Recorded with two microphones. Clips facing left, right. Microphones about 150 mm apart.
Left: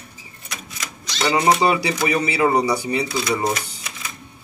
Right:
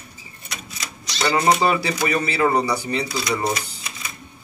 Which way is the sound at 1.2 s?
20° left (ahead or behind).